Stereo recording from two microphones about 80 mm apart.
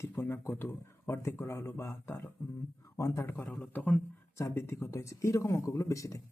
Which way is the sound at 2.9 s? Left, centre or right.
Left.